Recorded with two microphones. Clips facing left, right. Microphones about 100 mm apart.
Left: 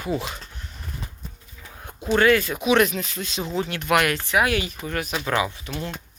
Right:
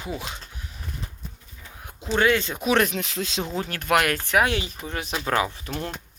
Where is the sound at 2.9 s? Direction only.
80° right.